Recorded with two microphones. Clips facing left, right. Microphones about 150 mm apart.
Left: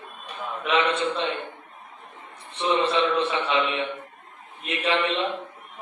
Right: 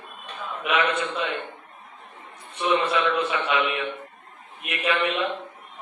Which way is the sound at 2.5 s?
30° left (ahead or behind).